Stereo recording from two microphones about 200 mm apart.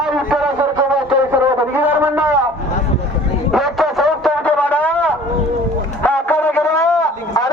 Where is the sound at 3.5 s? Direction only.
Centre (ahead or behind).